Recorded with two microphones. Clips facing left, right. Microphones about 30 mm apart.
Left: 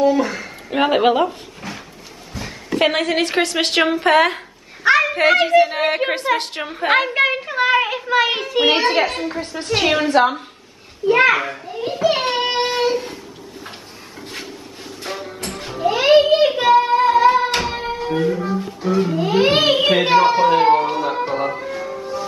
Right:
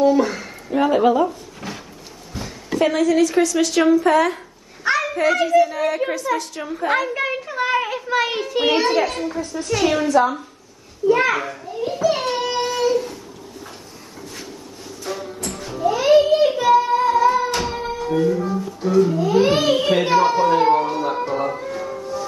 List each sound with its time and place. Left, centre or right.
0.0 s speech: centre
0.7 s speech: left
1.6 s a sound: centre
2.8 s a woman's voice: left
4.8 s a woman's voice: left
7.2 s child singing: left
8.6 s a child's voice: left
9.3 s a woman's voice: left
11.5 s child singing: left
15.2 s music: left
16.9 s music: left
18.9 s a sound: left; by 22.0 s centre